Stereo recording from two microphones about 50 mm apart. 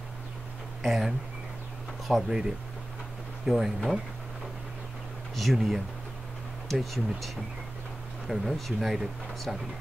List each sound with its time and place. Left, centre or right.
0.8 s speech: centre
3.4 s speech: centre
5.3 s speech: centre